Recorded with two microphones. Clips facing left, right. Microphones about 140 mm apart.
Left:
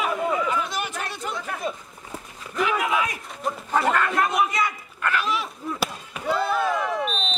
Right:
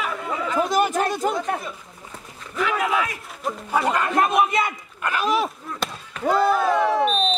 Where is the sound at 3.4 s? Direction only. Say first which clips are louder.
Right 1 dB; centre (ahead or behind).